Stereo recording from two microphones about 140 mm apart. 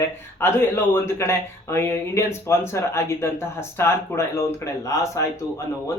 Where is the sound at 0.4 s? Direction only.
15° left (ahead or behind).